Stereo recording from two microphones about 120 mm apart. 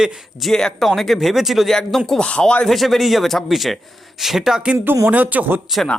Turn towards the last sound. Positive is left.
turn(degrees=0)  # may be behind; listen again after turning